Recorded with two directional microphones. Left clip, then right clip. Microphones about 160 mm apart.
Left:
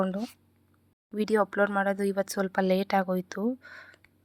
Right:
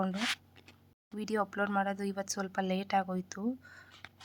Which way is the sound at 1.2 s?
35° left (ahead or behind).